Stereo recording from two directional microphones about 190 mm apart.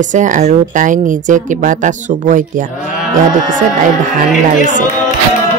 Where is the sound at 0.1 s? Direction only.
40° right (ahead or behind).